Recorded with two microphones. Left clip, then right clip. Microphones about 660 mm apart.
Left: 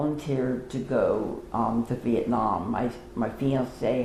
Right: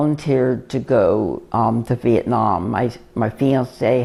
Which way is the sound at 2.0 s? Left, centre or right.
Right.